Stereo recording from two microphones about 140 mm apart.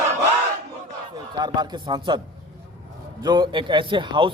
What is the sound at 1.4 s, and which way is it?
Speech, 30° right (ahead or behind).